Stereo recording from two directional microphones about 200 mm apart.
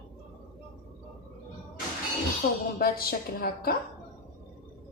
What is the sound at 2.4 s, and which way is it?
Speech, 50° left (ahead or behind).